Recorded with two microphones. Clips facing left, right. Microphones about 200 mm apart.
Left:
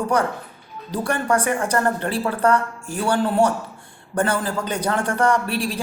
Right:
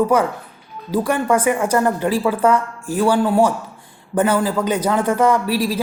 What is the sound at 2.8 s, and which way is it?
Speech, 90° right.